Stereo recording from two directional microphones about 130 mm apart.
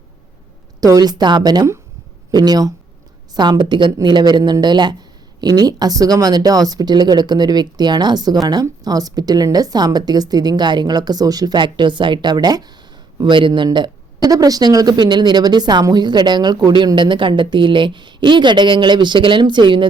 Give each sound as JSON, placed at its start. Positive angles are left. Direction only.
{"t": 0.8, "sound": "speech", "side_deg": -30}